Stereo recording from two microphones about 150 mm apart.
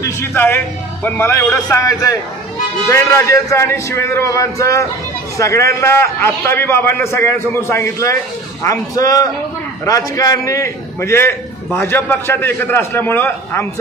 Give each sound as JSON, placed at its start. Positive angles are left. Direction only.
{"t": 0.0, "sound": "a man's voice", "side_deg": 15}